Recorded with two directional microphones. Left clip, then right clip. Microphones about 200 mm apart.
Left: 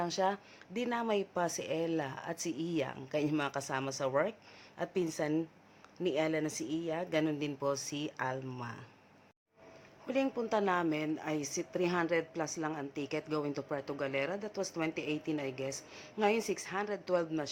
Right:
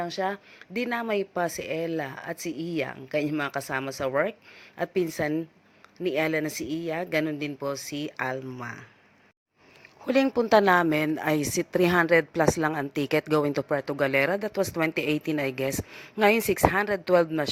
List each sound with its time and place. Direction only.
0.0 s a woman's voice: 10° right (ahead or behind)
10.1 s speech: 40° right (ahead or behind)